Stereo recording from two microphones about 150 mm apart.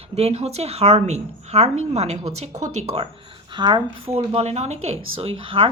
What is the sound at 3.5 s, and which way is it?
Speech, 30° right (ahead or behind).